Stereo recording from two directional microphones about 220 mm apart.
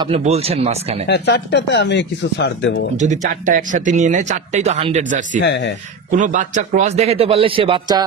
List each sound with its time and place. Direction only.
0.0 s a man's voice: 30° right (ahead or behind)
1.0 s speech: 50° left (ahead or behind)
3.0 s speech: 35° right (ahead or behind)
5.4 s speech: 55° left (ahead or behind)
6.1 s a man's voice: 35° right (ahead or behind)